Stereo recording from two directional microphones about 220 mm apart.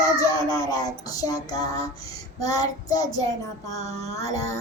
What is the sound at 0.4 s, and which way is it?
Child singing, 15° left (ahead or behind).